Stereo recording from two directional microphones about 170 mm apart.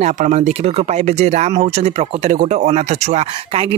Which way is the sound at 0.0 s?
40° right (ahead or behind).